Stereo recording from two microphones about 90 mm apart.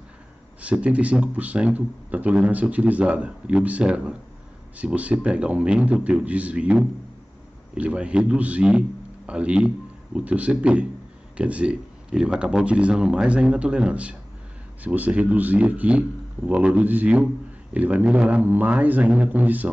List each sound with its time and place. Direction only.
0.6 s speech: 15° right (ahead or behind)